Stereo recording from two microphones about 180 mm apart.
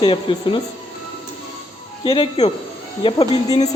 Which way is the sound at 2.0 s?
30° left (ahead or behind).